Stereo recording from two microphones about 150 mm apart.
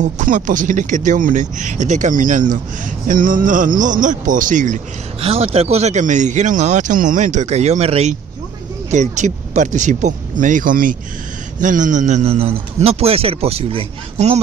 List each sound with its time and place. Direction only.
0.0 s speech: 60° right (ahead or behind)
5.2 s a man's voice: 40° right (ahead or behind)